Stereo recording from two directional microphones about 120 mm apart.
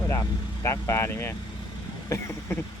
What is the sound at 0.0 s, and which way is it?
Speech, 25° left (ahead or behind).